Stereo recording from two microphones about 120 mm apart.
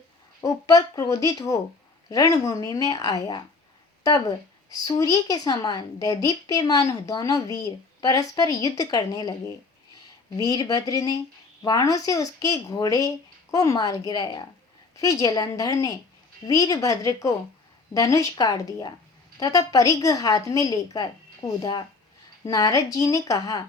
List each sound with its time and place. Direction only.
0.4 s a woman's voice: 30° left (ahead or behind)
4.7 s a woman's voice: 30° left (ahead or behind)